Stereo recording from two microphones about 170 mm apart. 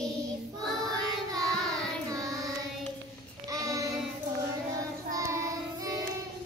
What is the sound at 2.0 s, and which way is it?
Child singing, 20° right (ahead or behind).